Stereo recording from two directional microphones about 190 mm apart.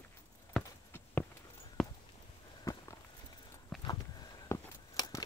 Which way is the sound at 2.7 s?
15° left (ahead or behind).